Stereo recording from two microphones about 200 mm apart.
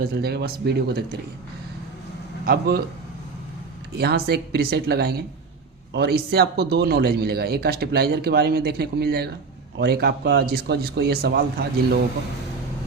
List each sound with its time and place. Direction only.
0.0 s speech: 50° right (ahead or behind)
2.5 s speech: 50° right (ahead or behind)
3.9 s speech: 55° right (ahead or behind)